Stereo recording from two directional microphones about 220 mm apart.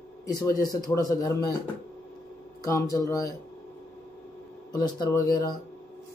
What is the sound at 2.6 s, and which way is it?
Speech, 15° left (ahead or behind).